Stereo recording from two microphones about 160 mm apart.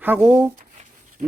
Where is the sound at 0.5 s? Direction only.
50° right (ahead or behind).